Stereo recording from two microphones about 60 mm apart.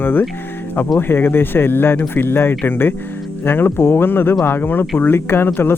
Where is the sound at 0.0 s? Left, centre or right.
Left.